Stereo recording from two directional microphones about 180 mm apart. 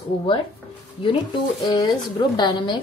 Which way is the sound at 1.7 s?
25° left (ahead or behind).